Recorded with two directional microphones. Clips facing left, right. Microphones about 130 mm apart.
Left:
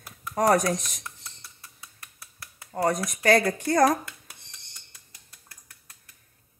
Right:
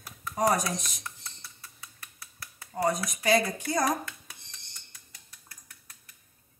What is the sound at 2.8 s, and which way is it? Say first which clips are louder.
Speech: left 3 dB; 80° left.